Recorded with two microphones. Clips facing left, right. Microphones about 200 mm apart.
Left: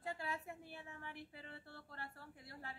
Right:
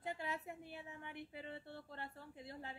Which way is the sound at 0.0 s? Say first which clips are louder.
Right 1 dB; 20° right (ahead or behind).